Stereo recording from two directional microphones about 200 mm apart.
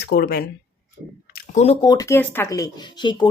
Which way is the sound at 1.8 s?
20° left (ahead or behind).